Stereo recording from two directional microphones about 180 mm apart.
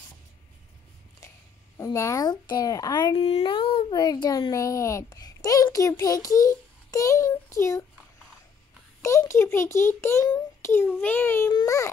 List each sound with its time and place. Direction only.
1.2 s a sound: 15° left (ahead or behind)
1.8 s a child's voice: 15° left (ahead or behind)
9.0 s a child's voice: 15° left (ahead or behind)